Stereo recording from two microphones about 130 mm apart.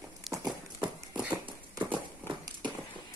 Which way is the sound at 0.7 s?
35° right (ahead or behind).